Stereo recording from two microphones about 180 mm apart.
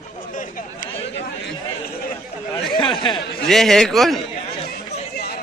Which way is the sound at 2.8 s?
25° left (ahead or behind).